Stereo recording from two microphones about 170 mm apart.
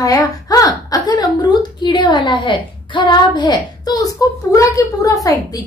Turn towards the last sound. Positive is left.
turn(degrees=20)  # may be behind; listen again after turning